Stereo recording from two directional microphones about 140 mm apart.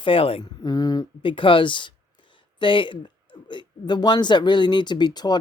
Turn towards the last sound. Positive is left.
turn(degrees=30)  # may be behind; listen again after turning